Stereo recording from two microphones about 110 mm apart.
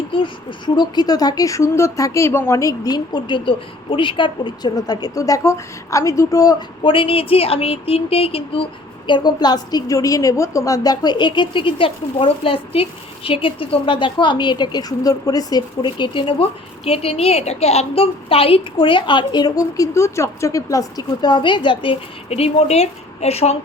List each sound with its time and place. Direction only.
0.1 s speech: 50° left (ahead or behind); by 6.6 s 35° left (ahead or behind)
6.8 s a woman's voice: 55° left (ahead or behind); by 23.6 s 70° left (ahead or behind)